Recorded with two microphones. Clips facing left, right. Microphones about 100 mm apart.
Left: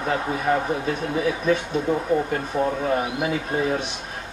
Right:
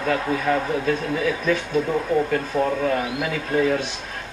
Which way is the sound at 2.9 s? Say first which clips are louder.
Left 1 dB; 25° left (ahead or behind).